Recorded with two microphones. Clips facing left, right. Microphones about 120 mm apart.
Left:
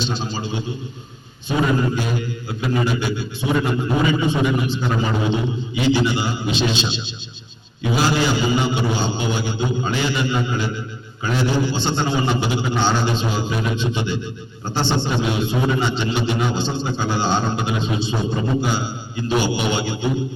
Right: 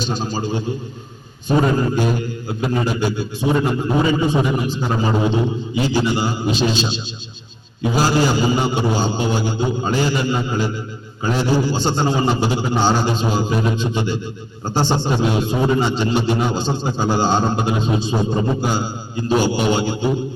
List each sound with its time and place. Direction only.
0.0 s a man's voice: 45° right (ahead or behind)